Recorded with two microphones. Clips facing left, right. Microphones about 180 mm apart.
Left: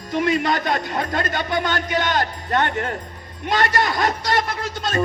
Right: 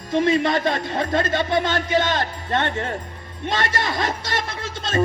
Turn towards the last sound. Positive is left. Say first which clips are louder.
# left 2 dB
turn(degrees=-25)  # may be behind; listen again after turning